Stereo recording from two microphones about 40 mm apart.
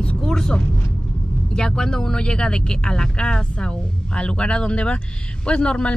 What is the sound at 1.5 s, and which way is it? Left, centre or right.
Speech, centre.